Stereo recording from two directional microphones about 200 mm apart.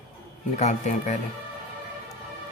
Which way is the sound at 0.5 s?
35° left (ahead or behind).